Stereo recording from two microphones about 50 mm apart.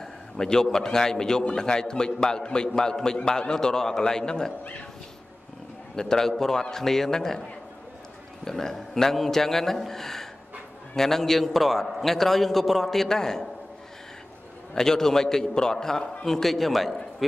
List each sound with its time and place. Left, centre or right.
0.0 s a man's voice: centre
5.9 s a man's voice: centre
8.5 s a man's voice: centre
14.7 s a man's voice: centre